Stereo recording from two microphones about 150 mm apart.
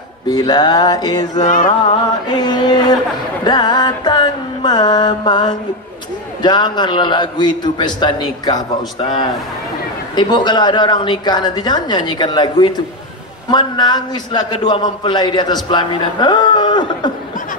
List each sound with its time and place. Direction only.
0.3 s a man's voice: 30° left (ahead or behind)
1.4 s music: 60° left (ahead or behind)
1.9 s a man's voice: 30° left (ahead or behind)
3.4 s music: 30° left (ahead or behind)
6.4 s a man's voice: 30° left (ahead or behind)
10.1 s a man's voice: 30° left (ahead or behind)